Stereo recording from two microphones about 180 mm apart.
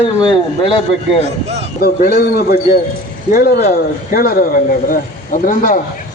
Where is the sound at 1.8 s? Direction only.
60° left (ahead or behind).